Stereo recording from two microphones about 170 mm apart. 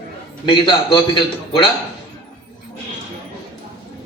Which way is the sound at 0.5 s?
30° left (ahead or behind).